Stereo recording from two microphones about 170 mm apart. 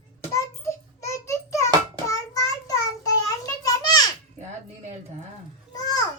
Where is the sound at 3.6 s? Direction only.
20° left (ahead or behind).